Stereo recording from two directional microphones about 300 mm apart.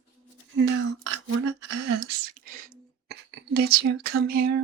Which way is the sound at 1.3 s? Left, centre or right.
Right.